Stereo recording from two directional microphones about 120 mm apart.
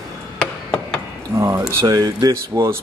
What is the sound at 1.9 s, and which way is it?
Speech, 25° right (ahead or behind).